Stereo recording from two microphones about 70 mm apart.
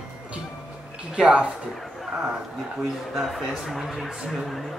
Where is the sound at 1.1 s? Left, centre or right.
Centre.